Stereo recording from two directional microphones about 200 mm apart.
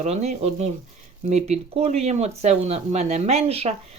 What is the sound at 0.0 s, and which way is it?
Speech, 35° right (ahead or behind).